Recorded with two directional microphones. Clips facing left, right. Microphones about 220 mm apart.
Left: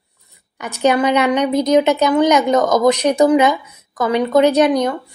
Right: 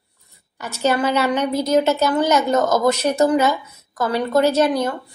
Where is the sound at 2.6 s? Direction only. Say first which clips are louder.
Left 4 dB; 5° right (ahead or behind).